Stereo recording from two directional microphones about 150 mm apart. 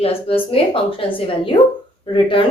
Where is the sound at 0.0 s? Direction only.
40° left (ahead or behind).